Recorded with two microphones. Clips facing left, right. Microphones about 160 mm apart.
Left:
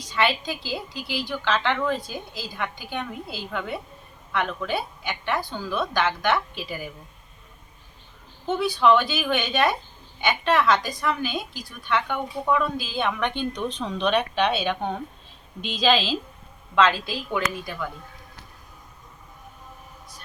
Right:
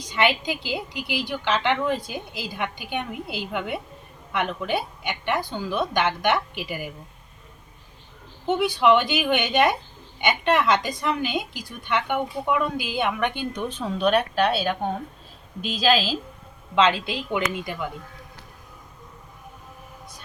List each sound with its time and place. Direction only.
0.1 s a woman's voice: 20° right (ahead or behind)
8.4 s a woman's voice: 20° right (ahead or behind)
16.7 s a woman's voice: 20° right (ahead or behind)